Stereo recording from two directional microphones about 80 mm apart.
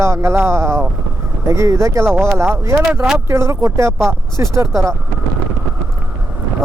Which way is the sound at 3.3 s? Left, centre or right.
Right.